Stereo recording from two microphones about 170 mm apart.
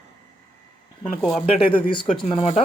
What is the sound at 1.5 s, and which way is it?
Speech, 30° left (ahead or behind).